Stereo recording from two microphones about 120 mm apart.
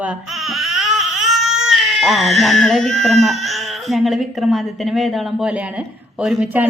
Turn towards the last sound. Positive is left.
turn(degrees=-5)  # may be behind; listen again after turning